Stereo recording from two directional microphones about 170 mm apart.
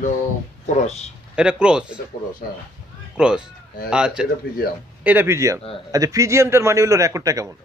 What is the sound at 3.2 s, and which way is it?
A man's voice, 5° right (ahead or behind).